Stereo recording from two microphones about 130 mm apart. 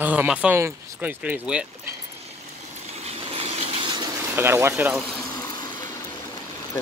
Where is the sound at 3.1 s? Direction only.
50° right (ahead or behind).